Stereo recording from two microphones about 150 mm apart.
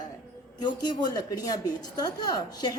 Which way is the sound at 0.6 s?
30° left (ahead or behind).